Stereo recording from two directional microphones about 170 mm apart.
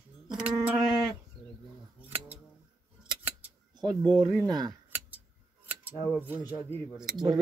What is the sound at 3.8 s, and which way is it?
Speech, 25° right (ahead or behind).